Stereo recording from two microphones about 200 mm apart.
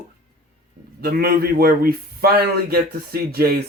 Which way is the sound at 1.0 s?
50° right (ahead or behind).